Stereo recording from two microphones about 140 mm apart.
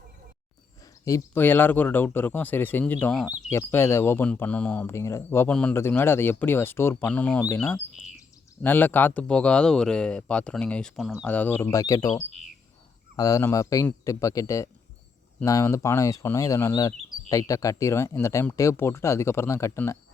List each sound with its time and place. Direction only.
1.0 s speech: 20° left (ahead or behind)
4.9 s speech: 20° left (ahead or behind); by 11.3 s centre (ahead or behind)
11.3 s speech: 15° left (ahead or behind)